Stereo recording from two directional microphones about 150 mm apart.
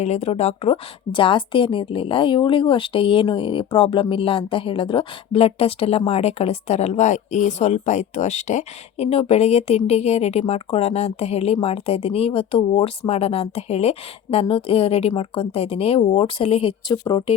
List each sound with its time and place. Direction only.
0.0 s a woman's voice: 45° left (ahead or behind)
16.9 s a woman's voice: 30° left (ahead or behind)